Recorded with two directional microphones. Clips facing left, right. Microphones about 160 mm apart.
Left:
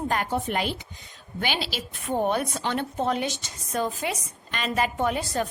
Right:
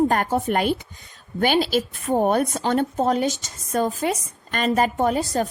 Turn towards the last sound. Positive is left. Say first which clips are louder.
# right 5 dB
turn(degrees=-40)  # may be behind; listen again after turning